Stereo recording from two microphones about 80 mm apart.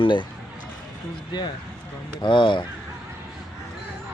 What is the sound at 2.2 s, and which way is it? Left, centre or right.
Speech, left.